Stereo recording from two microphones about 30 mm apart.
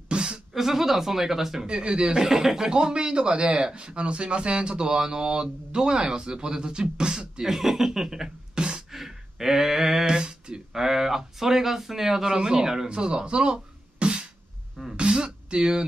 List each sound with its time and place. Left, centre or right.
0.1 s a sound: right
0.5 s speech: centre
1.7 s speech: right
2.2 s speech: centre
2.7 s speech: right
7.4 s speech: centre
8.5 s beatboxing: right
8.9 s a sound: centre
10.0 s a sound: right
10.7 s speech: centre
12.3 s speech: right
12.8 s music: right
15.0 s a sound: right